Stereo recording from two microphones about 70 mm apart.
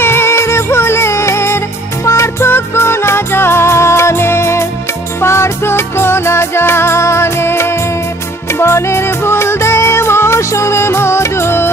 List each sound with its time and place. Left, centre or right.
0.0 s music: left